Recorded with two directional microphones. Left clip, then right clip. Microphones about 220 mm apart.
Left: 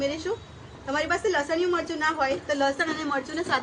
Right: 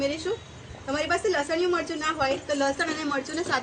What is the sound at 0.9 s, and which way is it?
A woman's voice, 5° right (ahead or behind).